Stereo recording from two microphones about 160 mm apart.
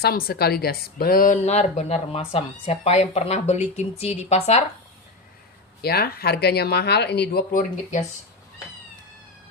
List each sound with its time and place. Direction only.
0.0 s speech: 70° left (ahead or behind); by 4.6 s 40° left (ahead or behind)
5.8 s speech: 75° left (ahead or behind)